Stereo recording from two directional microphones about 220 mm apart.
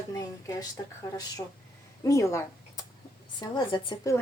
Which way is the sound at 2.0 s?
15° left (ahead or behind).